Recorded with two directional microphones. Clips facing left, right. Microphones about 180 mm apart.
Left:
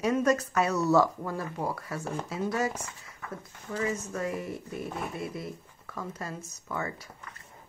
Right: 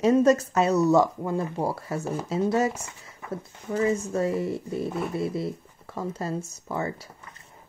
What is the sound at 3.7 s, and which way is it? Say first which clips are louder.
A woman's voice: right 7 dB; 30° right (ahead or behind).